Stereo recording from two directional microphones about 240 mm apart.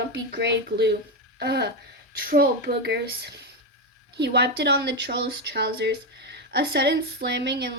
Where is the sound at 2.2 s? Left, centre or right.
Right.